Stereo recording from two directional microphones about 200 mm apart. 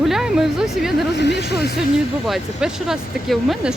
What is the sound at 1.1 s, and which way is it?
Speech, 60° left (ahead or behind).